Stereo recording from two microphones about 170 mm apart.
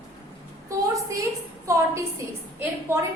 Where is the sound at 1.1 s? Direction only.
20° right (ahead or behind).